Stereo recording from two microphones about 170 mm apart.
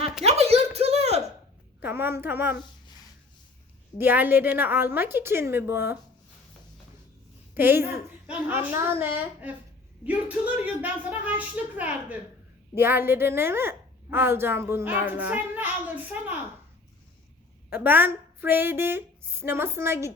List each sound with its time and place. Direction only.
0.3 s a sound: 40° right (ahead or behind)
1.8 s speech: 10° right (ahead or behind)
3.9 s a woman's voice: 10° right (ahead or behind)
7.5 s a woman's voice: 10° right (ahead or behind)
17.7 s a woman's voice: 10° right (ahead or behind)